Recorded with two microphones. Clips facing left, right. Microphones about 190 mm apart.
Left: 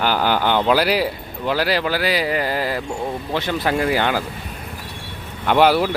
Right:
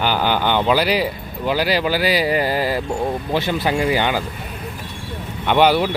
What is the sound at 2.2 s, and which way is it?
Speech, 30° right (ahead or behind).